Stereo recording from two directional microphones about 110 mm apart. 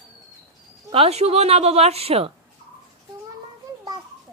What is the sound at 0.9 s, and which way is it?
A woman's voice, 70° right (ahead or behind).